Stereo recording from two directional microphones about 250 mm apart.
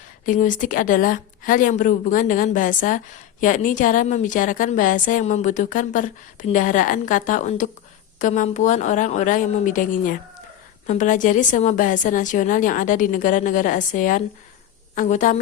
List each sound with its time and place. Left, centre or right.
0.3 s a woman's voice: left